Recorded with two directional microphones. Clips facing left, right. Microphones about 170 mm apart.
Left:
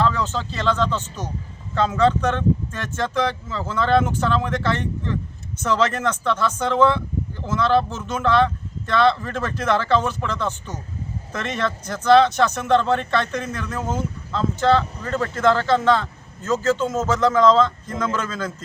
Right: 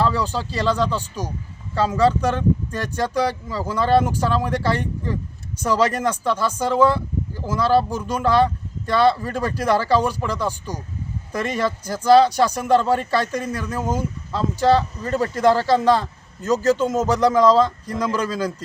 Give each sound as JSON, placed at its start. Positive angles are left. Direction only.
{"t": 0.0, "sound": "speech", "side_deg": -10}
{"t": 2.9, "sound": "speech", "side_deg": -40}
{"t": 3.2, "sound": "speech", "side_deg": -10}
{"t": 16.4, "sound": "speech", "side_deg": -40}
{"t": 16.7, "sound": "speech", "side_deg": -15}